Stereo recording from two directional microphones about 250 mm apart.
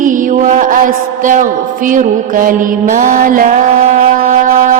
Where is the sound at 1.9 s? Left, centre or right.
Right.